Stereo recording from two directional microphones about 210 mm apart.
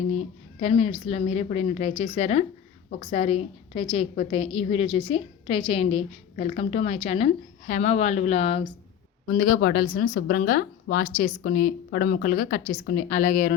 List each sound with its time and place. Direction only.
0.1 s a woman's voice: 30° left (ahead or behind)
9.3 s a woman's voice: 45° left (ahead or behind)